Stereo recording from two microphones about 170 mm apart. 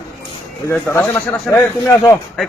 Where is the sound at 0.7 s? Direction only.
10° left (ahead or behind).